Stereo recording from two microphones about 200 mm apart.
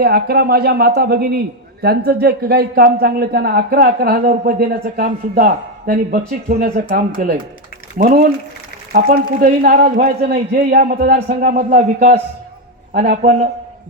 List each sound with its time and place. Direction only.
0.0 s a man's voice: 50° right (ahead or behind)